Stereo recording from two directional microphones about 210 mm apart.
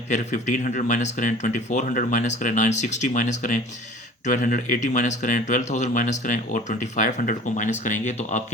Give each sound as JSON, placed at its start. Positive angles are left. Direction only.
{"t": 0.1, "sound": "speech", "side_deg": 35}